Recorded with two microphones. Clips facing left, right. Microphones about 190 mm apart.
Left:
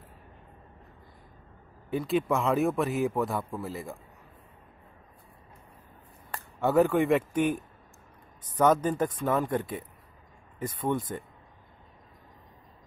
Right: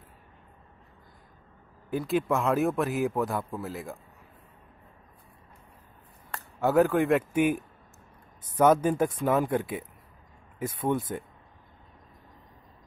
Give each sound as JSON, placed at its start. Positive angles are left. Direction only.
{"t": 1.9, "sound": "a man's voice", "side_deg": 0}
{"t": 6.3, "sound": "speech", "side_deg": 0}